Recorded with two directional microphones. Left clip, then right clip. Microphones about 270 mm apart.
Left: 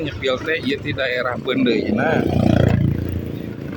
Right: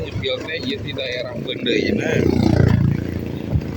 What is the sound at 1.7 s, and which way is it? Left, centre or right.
Speech, centre.